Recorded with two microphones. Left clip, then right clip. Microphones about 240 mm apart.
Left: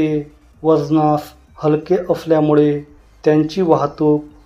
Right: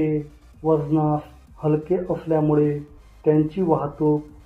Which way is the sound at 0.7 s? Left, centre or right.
Left.